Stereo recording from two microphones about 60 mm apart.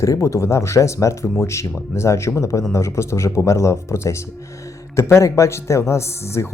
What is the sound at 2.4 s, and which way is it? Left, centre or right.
Speech, left.